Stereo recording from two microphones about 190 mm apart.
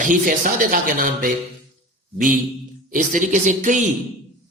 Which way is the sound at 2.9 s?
40° right (ahead or behind).